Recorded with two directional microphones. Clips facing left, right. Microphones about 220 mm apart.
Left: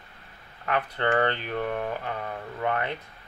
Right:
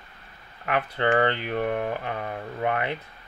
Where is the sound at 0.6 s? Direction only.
15° right (ahead or behind).